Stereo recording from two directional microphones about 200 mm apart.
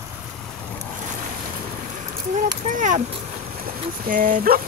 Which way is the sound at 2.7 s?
40° right (ahead or behind).